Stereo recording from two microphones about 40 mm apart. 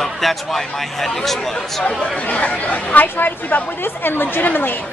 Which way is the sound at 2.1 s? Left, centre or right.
Left.